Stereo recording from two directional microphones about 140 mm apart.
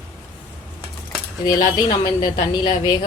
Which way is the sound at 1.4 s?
30° left (ahead or behind).